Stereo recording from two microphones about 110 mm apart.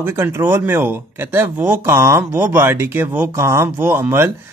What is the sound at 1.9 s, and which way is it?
Speech, 25° right (ahead or behind).